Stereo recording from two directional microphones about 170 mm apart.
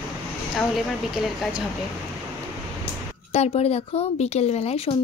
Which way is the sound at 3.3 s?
35° left (ahead or behind).